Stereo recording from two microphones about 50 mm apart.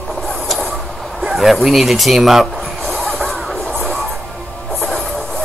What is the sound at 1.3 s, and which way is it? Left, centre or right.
Speech, centre.